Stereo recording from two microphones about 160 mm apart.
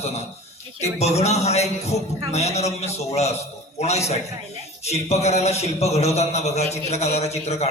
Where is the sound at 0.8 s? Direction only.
40° left (ahead or behind).